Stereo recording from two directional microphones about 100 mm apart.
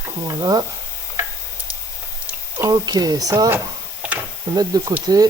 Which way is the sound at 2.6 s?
40° right (ahead or behind).